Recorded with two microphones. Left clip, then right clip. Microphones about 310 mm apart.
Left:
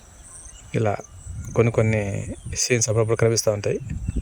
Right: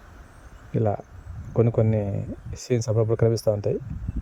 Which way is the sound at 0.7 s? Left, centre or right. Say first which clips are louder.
Left 2 dB; centre.